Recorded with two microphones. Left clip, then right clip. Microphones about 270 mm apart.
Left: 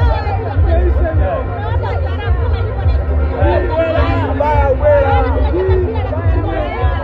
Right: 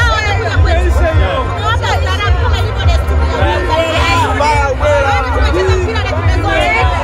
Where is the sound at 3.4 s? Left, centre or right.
Right.